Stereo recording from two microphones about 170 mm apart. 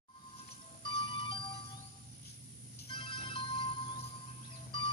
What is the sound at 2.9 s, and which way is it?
Music, 30° left (ahead or behind).